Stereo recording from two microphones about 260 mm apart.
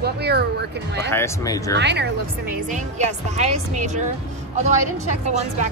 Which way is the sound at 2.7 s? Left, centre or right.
Right.